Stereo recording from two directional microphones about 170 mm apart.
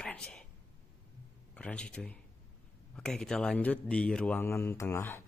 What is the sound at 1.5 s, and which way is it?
A man's voice, 5° left (ahead or behind).